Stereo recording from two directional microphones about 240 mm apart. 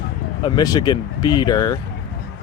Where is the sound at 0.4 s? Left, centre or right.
Centre.